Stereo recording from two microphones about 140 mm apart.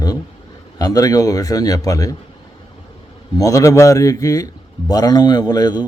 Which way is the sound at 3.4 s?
20° left (ahead or behind).